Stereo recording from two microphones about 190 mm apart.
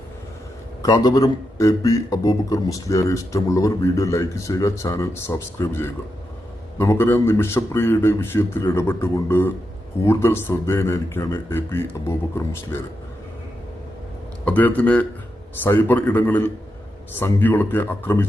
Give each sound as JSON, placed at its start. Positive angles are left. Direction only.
{"t": 0.8, "sound": "a man's voice", "side_deg": 20}
{"t": 14.4, "sound": "a man's voice", "side_deg": 10}